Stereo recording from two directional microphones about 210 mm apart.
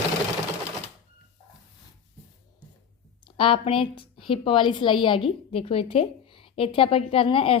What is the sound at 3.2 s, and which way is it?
A woman's voice, 25° left (ahead or behind).